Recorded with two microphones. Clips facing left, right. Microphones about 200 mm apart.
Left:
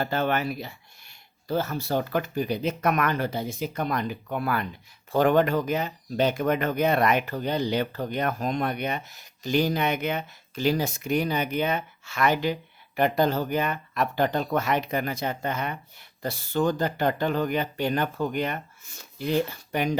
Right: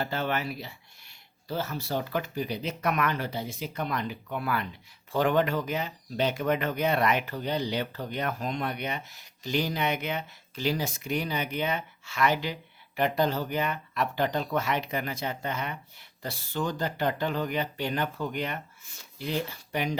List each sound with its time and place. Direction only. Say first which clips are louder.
0.0 s speech: left 4 dB; 50° left (ahead or behind)